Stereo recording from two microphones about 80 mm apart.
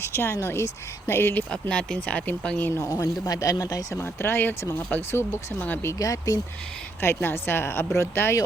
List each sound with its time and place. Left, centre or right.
0.0 s speech: left
1.7 s speech: centre
2.6 s speech: left
3.0 s speech: left
3.9 s speech: left
5.9 s speech: left
7.0 s speech: left